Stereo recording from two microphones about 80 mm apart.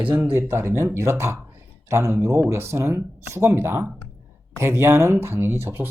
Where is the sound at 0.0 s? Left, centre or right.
Right.